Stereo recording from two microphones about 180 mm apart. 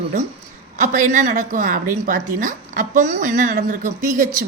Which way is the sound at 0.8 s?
45° right (ahead or behind).